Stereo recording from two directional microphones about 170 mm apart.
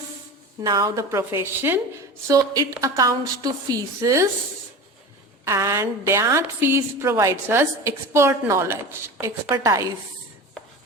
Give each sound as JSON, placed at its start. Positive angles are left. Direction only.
{"t": 0.6, "sound": "a woman's voice", "side_deg": -25}
{"t": 5.5, "sound": "a woman's voice", "side_deg": -15}